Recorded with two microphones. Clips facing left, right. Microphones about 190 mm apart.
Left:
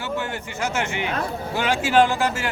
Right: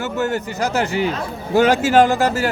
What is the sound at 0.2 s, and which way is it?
A man's voice, 40° right (ahead or behind).